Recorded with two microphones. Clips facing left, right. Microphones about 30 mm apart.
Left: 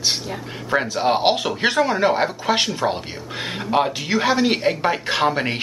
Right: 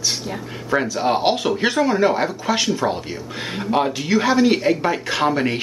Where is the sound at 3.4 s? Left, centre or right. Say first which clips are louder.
Even; centre.